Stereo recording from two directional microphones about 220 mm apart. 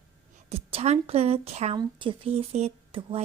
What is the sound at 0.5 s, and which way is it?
Speech, 25° right (ahead or behind).